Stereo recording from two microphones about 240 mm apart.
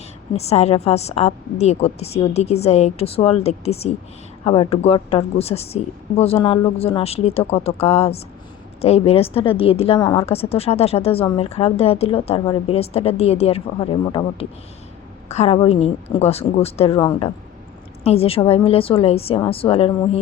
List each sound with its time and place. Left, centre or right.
0.3 s a woman's voice: left